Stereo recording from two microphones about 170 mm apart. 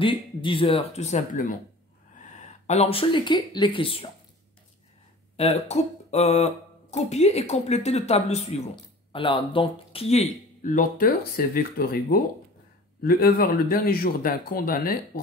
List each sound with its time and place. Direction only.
0.0 s speech: 30° left (ahead or behind); by 1.6 s 50° left (ahead or behind)
2.6 s speech: 40° left (ahead or behind)
5.4 s speech: 40° left (ahead or behind)
10.6 s speech: 50° left (ahead or behind)